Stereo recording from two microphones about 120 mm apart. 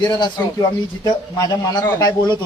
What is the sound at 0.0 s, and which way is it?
Speech, 40° left (ahead or behind).